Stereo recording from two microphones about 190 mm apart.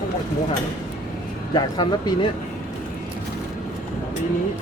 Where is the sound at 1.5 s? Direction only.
20° left (ahead or behind).